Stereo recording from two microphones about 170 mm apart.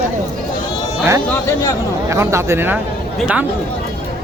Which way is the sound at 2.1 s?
15° right (ahead or behind).